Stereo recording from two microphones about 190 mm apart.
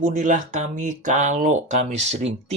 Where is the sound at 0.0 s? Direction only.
40° right (ahead or behind).